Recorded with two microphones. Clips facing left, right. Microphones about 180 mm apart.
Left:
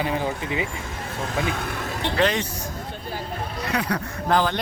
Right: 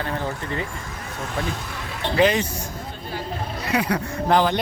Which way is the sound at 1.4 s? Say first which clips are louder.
Left 3 dB; 60° left (ahead or behind).